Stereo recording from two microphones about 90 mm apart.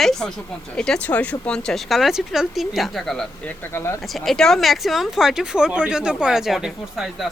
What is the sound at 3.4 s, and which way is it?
Speech, 25° left (ahead or behind).